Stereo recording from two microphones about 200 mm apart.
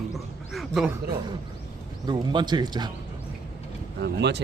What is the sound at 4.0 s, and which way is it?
Speech, 60° right (ahead or behind).